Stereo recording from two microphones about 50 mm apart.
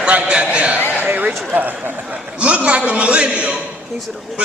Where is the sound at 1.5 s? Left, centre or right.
Right.